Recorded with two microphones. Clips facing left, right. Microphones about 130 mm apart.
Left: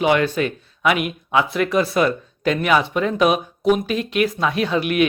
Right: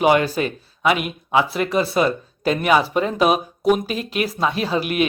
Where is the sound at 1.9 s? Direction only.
30° right (ahead or behind).